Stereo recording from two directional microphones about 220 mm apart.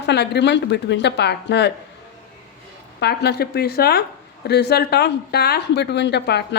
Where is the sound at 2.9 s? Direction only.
50° left (ahead or behind).